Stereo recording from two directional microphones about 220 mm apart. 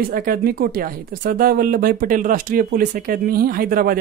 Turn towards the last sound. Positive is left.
turn(degrees=-40)  # may be behind; listen again after turning